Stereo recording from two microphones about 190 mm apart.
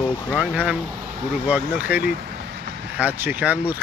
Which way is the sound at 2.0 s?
55° right (ahead or behind).